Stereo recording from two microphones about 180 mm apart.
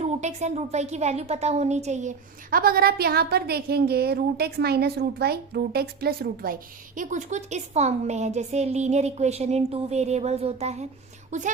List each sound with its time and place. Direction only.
0.0 s a woman's voice: 40° right (ahead or behind)